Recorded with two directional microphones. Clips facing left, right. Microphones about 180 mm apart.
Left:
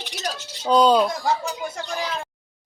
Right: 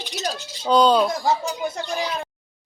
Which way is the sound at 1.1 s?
20° right (ahead or behind).